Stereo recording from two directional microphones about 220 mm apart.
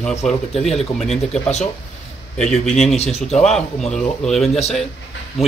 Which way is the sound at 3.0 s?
30° left (ahead or behind).